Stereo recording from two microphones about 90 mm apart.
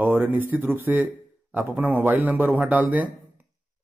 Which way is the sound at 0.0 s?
20° right (ahead or behind).